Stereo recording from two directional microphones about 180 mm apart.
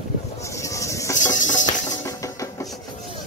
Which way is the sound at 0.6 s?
15° left (ahead or behind).